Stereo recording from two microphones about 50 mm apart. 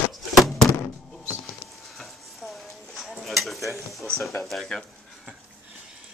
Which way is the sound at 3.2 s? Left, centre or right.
Centre.